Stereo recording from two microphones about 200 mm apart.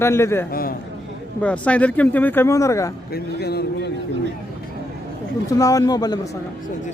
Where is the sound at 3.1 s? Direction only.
55° left (ahead or behind).